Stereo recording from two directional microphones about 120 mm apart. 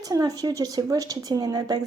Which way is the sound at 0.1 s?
30° right (ahead or behind).